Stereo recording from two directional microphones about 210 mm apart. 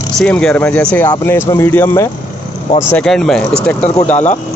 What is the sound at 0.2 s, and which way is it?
Speech, 5° left (ahead or behind).